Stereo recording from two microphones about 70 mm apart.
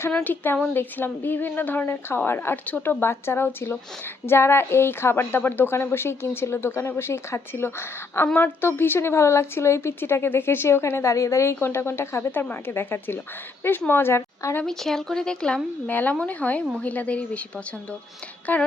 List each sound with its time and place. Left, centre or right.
0.3 s a woman's voice: left
14.6 s speech: centre
15.9 s a woman's voice: left
18.5 s a woman's voice: left